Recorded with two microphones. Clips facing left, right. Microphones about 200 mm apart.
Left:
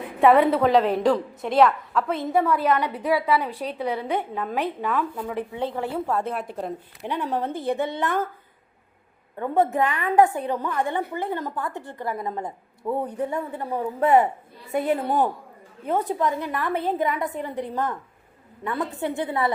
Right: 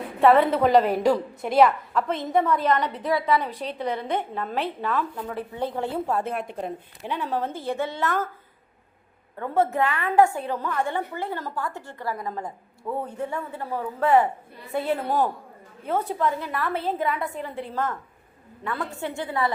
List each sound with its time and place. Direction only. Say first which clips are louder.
0.2 s a woman's voice: left 1 dB; 15° left (ahead or behind)
0.5 s a woman's voice: even; centre (ahead or behind)
5.6 s speech: right 1 dB; 15° right (ahead or behind)
6.2 s a woman's voice: even; centre (ahead or behind)
7.0 s a woman's voice: left 1 dB; 15° left (ahead or behind)
9.7 s a woman's voice: even; 15° left (ahead or behind)